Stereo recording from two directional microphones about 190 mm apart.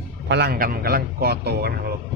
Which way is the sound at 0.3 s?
55° right (ahead or behind).